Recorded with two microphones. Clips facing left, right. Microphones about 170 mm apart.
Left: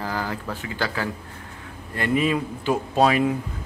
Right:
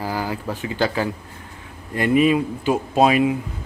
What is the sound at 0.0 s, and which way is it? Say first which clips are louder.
Speech: right 3 dB; 10° right (ahead or behind).